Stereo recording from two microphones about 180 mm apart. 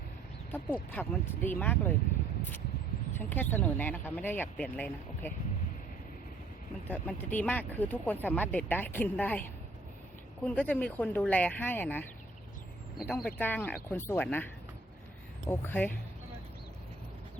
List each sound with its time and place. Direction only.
0.5 s speech: 10° left (ahead or behind)
3.2 s speech: 10° left (ahead or behind)
6.8 s speech: 10° left (ahead or behind)
10.4 s speech: 5° left (ahead or behind)